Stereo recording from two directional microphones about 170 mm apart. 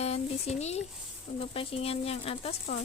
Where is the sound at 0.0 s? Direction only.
40° left (ahead or behind).